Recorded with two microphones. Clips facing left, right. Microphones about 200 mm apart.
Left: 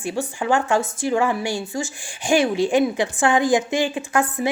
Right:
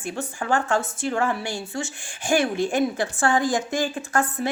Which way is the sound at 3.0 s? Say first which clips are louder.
Left 3 dB; 20° left (ahead or behind).